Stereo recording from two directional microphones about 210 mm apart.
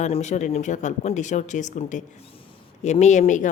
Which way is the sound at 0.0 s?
35° left (ahead or behind).